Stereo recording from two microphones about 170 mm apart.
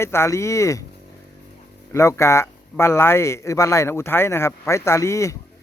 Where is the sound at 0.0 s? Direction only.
15° left (ahead or behind).